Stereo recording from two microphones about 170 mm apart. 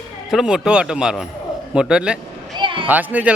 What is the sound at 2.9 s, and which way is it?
Speech, 10° right (ahead or behind).